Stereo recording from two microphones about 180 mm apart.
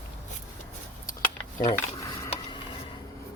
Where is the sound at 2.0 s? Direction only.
15° left (ahead or behind).